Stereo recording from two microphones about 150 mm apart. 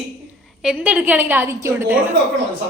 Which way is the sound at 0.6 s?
5° right (ahead or behind).